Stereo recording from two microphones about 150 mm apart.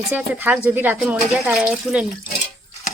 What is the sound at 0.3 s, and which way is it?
Speech, 10° right (ahead or behind).